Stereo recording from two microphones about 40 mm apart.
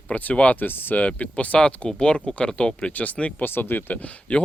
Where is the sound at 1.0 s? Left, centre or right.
Left.